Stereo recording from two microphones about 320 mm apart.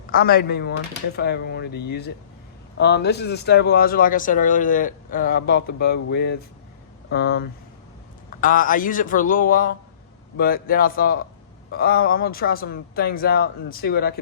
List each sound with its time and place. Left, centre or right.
0.1 s speech: left